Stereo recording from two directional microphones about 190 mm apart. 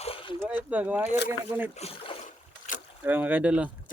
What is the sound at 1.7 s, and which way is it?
Boat, 35° left (ahead or behind).